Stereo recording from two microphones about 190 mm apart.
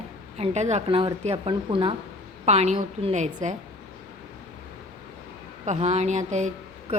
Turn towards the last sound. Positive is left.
turn(degrees=-40)  # may be behind; listen again after turning